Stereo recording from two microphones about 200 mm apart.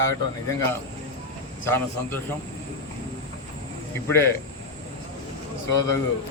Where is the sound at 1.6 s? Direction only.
10° left (ahead or behind).